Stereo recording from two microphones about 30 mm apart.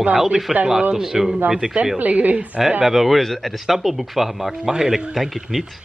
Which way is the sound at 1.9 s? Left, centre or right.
Right.